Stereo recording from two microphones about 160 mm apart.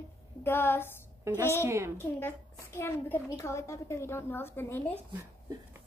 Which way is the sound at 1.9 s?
15° left (ahead or behind).